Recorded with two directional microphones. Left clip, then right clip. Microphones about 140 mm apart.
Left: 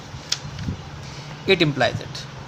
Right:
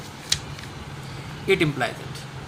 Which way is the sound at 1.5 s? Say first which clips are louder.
Left 3 dB; 90° left.